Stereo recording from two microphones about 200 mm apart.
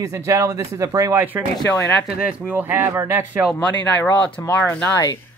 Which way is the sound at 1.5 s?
15° left (ahead or behind).